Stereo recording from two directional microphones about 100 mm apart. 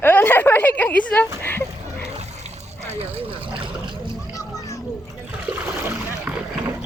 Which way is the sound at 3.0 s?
65° right (ahead or behind).